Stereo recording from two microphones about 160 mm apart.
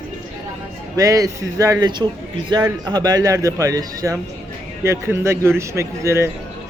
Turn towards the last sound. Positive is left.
turn(degrees=-15)  # may be behind; listen again after turning